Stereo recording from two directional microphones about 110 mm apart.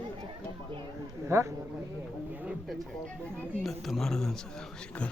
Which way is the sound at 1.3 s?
25° right (ahead or behind).